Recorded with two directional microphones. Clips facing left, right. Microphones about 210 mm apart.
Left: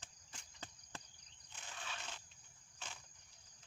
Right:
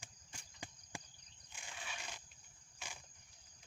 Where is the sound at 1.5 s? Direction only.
10° right (ahead or behind).